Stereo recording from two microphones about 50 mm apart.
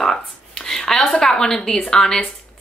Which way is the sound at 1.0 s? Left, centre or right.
Left.